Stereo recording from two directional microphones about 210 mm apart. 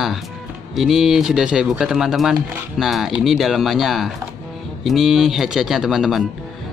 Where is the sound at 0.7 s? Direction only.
Centre (ahead or behind).